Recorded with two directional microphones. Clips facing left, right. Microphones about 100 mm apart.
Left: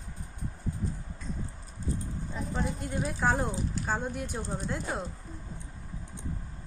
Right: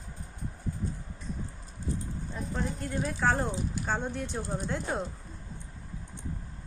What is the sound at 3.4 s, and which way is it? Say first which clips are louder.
Speech: even; 5° left (ahead or behind).